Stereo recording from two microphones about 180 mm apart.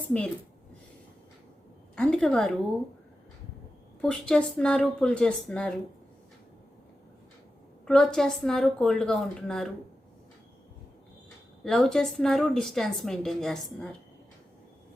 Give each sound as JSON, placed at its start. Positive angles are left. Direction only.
{"t": 2.0, "sound": "a woman's voice", "side_deg": 5}
{"t": 4.0, "sound": "a woman's voice", "side_deg": 5}
{"t": 7.9, "sound": "a woman's voice", "side_deg": 5}
{"t": 11.6, "sound": "a woman's voice", "side_deg": 0}